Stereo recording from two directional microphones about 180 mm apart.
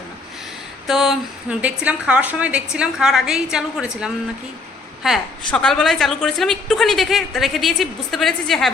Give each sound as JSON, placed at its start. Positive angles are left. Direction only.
{"t": 0.9, "sound": "a woman's voice", "side_deg": 0}